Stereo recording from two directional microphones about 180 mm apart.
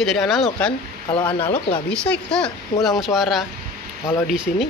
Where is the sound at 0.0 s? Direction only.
Centre (ahead or behind).